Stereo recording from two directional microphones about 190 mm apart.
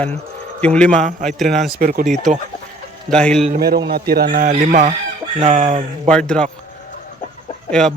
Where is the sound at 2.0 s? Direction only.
Centre (ahead or behind).